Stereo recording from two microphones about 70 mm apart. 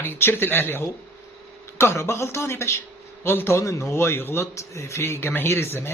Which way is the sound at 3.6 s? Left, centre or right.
Left.